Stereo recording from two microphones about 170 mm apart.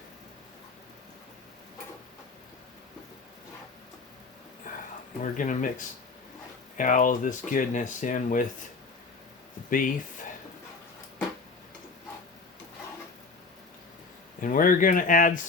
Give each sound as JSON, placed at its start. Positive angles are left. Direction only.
{"t": 5.2, "sound": "speech", "side_deg": 50}
{"t": 9.6, "sound": "speech", "side_deg": 55}
{"t": 14.4, "sound": "speech", "side_deg": 55}